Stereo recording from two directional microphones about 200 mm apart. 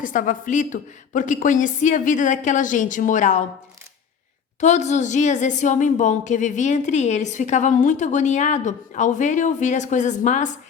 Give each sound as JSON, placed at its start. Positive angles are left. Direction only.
{"t": 0.0, "sound": "a woman's voice", "side_deg": 40}
{"t": 4.6, "sound": "a woman's voice", "side_deg": 35}